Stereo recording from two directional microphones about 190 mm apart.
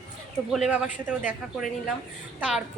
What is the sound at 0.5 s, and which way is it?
A woman's voice, 5° right (ahead or behind).